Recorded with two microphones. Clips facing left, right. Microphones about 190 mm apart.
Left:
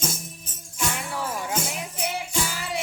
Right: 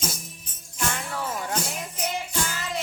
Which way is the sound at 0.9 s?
10° left (ahead or behind).